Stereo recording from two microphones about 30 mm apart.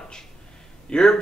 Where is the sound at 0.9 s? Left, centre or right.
Left.